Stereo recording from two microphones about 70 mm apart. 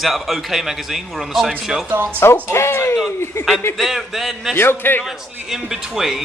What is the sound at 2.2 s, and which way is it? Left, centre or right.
Speech, left.